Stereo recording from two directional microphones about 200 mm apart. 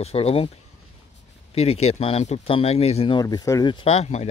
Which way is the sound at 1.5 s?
30° left (ahead or behind).